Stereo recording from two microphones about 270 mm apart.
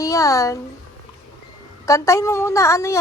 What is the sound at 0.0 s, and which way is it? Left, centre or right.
Speech, centre.